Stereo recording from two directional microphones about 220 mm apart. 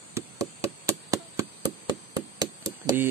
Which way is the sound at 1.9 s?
15° right (ahead or behind).